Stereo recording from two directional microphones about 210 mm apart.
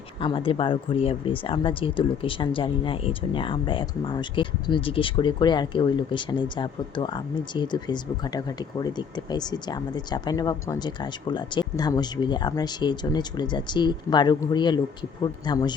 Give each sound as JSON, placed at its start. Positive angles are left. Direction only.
{"t": 0.2, "sound": "speech", "side_deg": 25}